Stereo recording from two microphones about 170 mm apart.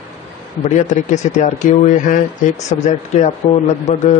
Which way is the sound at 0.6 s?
45° left (ahead or behind).